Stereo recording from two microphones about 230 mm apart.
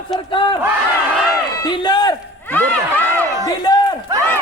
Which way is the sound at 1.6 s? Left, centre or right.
Centre.